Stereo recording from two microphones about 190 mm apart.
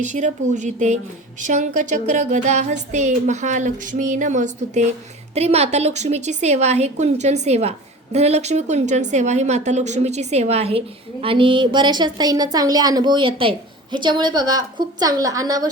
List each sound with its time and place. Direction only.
0.0 s a woman's voice: 40° right (ahead or behind); by 15.7 s 20° right (ahead or behind)